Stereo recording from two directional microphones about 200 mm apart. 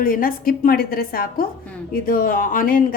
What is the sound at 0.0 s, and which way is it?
Speech, 45° left (ahead or behind).